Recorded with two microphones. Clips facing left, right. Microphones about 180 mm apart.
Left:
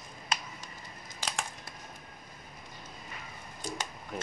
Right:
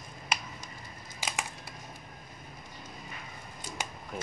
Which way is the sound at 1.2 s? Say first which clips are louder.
Even; 5° right (ahead or behind).